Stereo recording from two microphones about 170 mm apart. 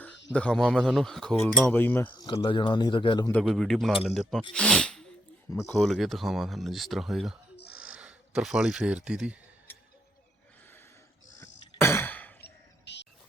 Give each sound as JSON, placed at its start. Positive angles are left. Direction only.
{"t": 0.3, "sound": "speech", "side_deg": 5}
{"t": 1.5, "sound": "cutlery", "side_deg": 10}
{"t": 2.1, "sound": "speech", "side_deg": 30}
{"t": 3.4, "sound": "speech", "side_deg": 0}
{"t": 5.5, "sound": "speech", "side_deg": 15}
{"t": 5.7, "sound": "speech", "side_deg": 0}
{"t": 7.5, "sound": "a sound", "side_deg": 70}
{"t": 7.9, "sound": "speech", "side_deg": -5}
{"t": 11.8, "sound": "throat clearing", "side_deg": 15}
{"t": 12.4, "sound": "a sound", "side_deg": 90}